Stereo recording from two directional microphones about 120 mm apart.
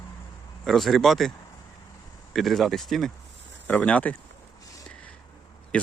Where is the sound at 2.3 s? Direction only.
Centre (ahead or behind).